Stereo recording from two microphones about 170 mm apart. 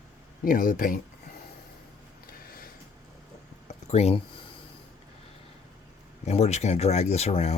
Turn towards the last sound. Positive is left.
turn(degrees=35)  # may be behind; listen again after turning